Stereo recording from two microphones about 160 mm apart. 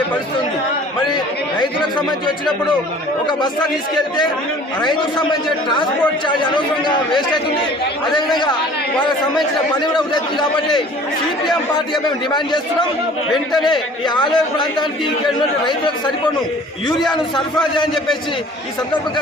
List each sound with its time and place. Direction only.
2.0 s a man's voice: 30° left (ahead or behind)
4.8 s a man's voice: 30° left (ahead or behind)
12.0 s a man's voice: 25° left (ahead or behind)
13.3 s a man's voice: centre (ahead or behind)
13.7 s a man's voice: 30° left (ahead or behind)